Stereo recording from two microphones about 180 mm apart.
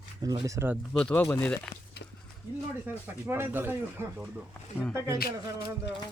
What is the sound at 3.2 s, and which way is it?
Speech, 10° right (ahead or behind).